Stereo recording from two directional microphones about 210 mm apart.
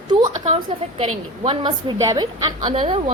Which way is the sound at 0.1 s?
25° right (ahead or behind).